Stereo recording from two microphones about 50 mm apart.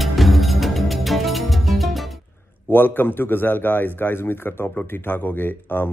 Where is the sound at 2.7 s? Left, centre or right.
Left.